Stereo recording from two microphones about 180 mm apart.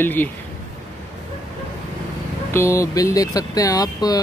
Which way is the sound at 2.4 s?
15° left (ahead or behind).